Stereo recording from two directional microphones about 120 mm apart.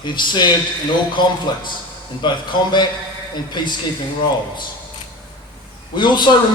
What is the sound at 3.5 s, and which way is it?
Speech, 40° left (ahead or behind).